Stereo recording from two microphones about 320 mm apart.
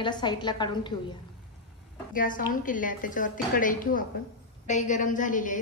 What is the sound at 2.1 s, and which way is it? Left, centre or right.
A woman's voice, left.